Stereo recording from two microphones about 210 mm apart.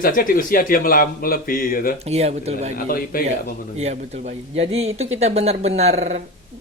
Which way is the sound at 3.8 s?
30° right (ahead or behind).